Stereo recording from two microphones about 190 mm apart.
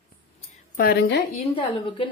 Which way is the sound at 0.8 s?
50° left (ahead or behind).